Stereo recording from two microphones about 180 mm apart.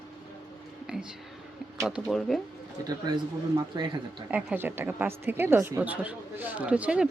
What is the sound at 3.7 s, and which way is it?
Speech, 25° right (ahead or behind).